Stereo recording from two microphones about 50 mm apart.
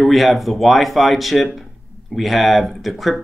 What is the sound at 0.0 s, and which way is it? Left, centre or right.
Speech, centre.